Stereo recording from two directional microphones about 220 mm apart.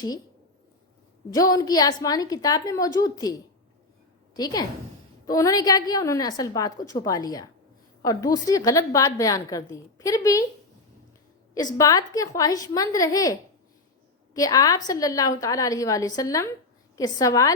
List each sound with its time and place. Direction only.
1.3 s a woman's voice: 15° left (ahead or behind)
11.5 s a woman's voice: 15° left (ahead or behind)
14.3 s a woman's voice: 15° left (ahead or behind)